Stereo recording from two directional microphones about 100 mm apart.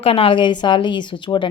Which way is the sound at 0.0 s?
65° left (ahead or behind).